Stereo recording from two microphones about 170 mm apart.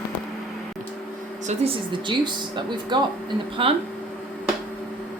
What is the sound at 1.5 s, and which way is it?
A man's voice, 30° right (ahead or behind).